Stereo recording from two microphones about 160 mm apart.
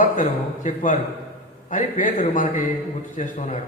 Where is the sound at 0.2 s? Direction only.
50° left (ahead or behind).